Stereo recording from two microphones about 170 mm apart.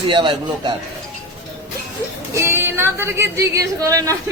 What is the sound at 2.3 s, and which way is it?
A woman's voice, 15° right (ahead or behind).